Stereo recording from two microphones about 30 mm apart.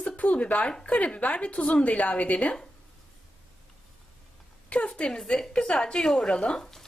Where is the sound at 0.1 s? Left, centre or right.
Left.